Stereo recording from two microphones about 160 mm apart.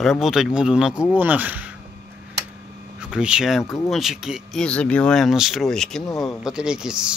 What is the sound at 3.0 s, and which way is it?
Speech, 5° right (ahead or behind).